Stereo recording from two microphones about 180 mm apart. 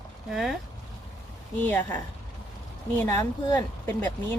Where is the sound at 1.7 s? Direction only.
10° left (ahead or behind).